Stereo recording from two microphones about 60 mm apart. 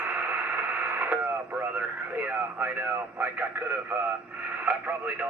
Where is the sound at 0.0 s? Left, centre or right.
Right.